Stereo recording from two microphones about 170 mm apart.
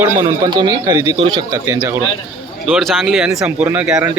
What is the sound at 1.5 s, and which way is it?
Speech, 15° right (ahead or behind).